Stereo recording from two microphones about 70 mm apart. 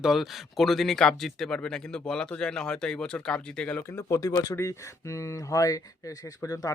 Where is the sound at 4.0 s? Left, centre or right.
Left.